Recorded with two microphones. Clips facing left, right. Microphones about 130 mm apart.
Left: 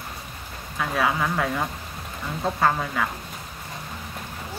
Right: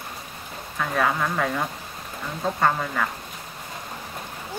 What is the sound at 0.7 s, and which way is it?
Speech, 5° left (ahead or behind).